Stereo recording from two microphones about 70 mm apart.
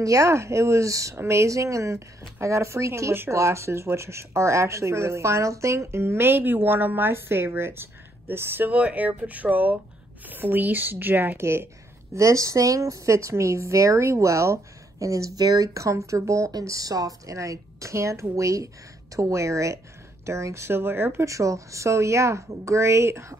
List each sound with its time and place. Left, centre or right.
0.0 s a woman's voice: right
21.3 s a woman's voice: right